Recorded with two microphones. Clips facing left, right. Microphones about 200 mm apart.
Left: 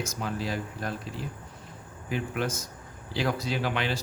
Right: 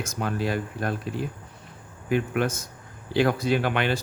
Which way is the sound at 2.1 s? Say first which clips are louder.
Right 6 dB; 55° right (ahead or behind).